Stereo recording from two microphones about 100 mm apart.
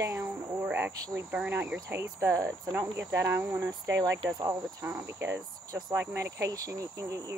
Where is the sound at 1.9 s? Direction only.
25° right (ahead or behind).